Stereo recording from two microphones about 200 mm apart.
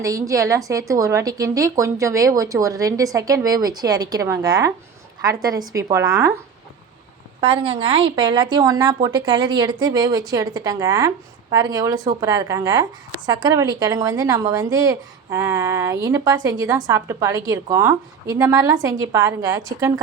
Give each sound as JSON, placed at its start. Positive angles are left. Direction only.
{"t": 0.0, "sound": "a woman's voice", "side_deg": -15}
{"t": 7.4, "sound": "a woman's voice", "side_deg": -30}